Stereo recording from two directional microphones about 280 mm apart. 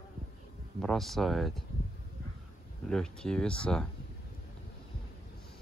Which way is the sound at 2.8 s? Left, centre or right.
Centre.